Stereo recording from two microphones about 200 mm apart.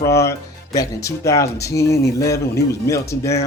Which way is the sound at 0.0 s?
15° left (ahead or behind).